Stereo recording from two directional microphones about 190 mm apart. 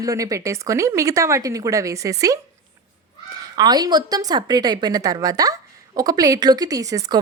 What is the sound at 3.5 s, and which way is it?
A woman's voice, 20° right (ahead or behind).